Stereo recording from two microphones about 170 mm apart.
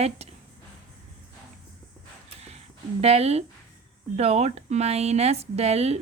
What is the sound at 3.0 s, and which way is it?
Speech, 40° right (ahead or behind).